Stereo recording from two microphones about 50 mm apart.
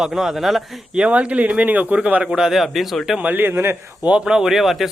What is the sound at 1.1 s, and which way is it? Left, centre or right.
Speech, right.